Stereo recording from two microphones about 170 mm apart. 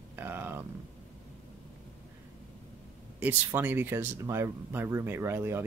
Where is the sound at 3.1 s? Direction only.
10° right (ahead or behind).